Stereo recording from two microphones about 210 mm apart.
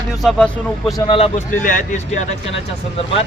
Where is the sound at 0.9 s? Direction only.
25° left (ahead or behind).